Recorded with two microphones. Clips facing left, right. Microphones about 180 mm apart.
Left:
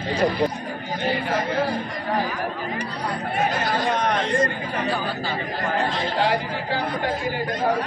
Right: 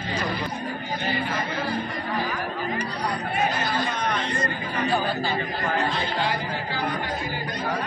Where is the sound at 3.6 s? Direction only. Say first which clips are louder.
Left 4 dB; 90° left.